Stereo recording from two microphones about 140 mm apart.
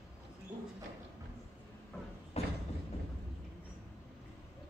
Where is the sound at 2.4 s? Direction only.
50° left (ahead or behind).